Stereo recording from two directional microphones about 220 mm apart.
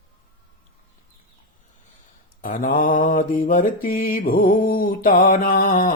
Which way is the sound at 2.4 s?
40° left (ahead or behind).